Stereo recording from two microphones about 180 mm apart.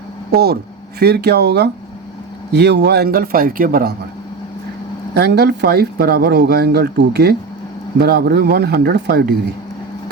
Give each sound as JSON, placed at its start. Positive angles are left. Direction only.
{"t": 0.3, "sound": "speech", "side_deg": -60}
{"t": 5.1, "sound": "speech", "side_deg": -65}